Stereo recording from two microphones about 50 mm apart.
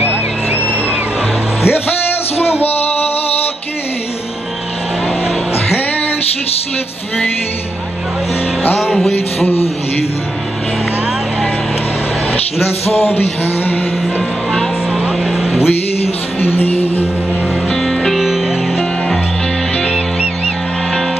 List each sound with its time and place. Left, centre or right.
0.0 s a sound: right
1.6 s music: left
13.1 s music: left
15.0 s vehicle: centre
16.3 s music: left
17.8 s music: centre